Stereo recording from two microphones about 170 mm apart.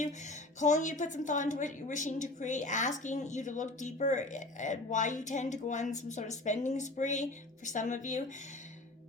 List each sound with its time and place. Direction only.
0.6 s a woman's voice: 45° left (ahead or behind)